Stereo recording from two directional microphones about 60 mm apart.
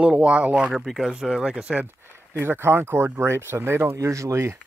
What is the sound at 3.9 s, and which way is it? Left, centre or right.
Speech, right.